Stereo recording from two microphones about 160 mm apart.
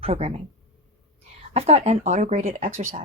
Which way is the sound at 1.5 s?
40° right (ahead or behind).